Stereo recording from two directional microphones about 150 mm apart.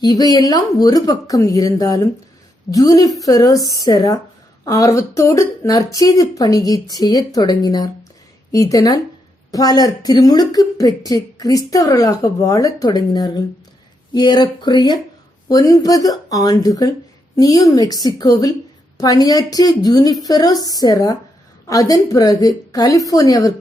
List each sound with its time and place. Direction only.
0.0 s speech: 25° left (ahead or behind)